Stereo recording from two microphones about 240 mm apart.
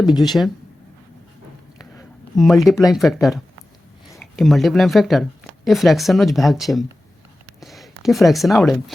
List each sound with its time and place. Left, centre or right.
0.2 s speech: centre
1.8 s speech: centre